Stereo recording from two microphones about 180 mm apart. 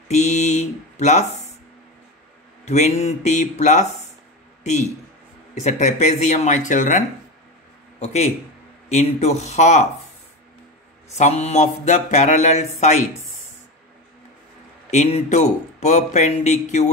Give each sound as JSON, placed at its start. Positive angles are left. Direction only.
{"t": 0.1, "sound": "speech", "side_deg": 40}
{"t": 2.6, "sound": "speech", "side_deg": 40}
{"t": 5.5, "sound": "speech", "side_deg": 40}
{"t": 11.1, "sound": "speech", "side_deg": 35}
{"t": 14.9, "sound": "speech", "side_deg": 40}